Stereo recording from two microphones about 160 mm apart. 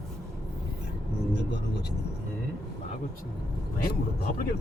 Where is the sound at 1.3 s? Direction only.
90° left.